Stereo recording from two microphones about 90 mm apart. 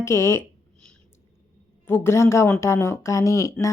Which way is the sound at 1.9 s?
25° left (ahead or behind).